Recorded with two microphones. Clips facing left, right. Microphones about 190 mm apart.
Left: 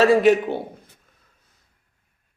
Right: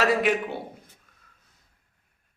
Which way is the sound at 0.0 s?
30° left (ahead or behind).